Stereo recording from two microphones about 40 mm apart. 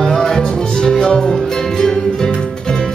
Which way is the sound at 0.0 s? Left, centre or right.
Centre.